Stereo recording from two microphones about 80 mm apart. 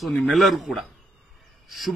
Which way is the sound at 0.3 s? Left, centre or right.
Centre.